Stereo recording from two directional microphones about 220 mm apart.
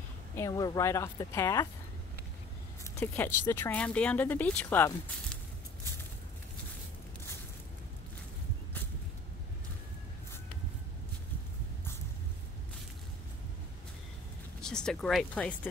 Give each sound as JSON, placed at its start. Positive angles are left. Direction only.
{"t": 0.4, "sound": "speech", "side_deg": 15}
{"t": 3.0, "sound": "speech", "side_deg": 10}
{"t": 14.6, "sound": "speech", "side_deg": 5}